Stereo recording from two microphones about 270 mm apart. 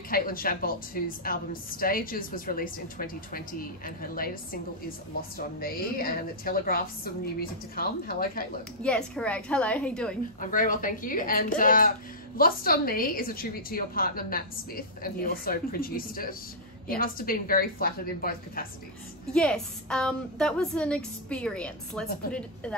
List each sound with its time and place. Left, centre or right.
0.1 s a woman's voice: left
8.8 s a woman's voice: centre
10.4 s a woman's voice: left
19.3 s a woman's voice: centre